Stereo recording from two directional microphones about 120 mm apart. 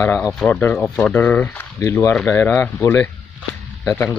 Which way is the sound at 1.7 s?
25° left (ahead or behind).